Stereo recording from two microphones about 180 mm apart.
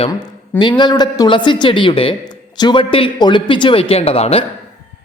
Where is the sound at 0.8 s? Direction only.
25° left (ahead or behind).